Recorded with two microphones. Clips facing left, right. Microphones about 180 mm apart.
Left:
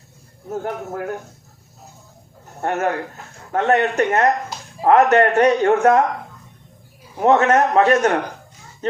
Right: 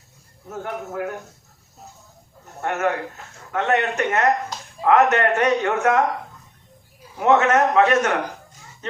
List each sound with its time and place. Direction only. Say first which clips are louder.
0.5 s a man's voice: left 3 dB; 35° left (ahead or behind)
2.6 s a man's voice: left 2 dB; 35° left (ahead or behind)
7.2 s a man's voice: left 2 dB; 35° left (ahead or behind)
8.8 s children playing: left 8 dB; 35° left (ahead or behind)